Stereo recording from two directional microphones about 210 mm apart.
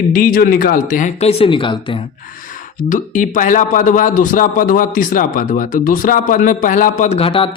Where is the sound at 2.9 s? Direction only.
40° left (ahead or behind).